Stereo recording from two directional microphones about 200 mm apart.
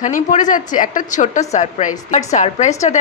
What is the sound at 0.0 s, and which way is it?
A woman's voice, 40° left (ahead or behind).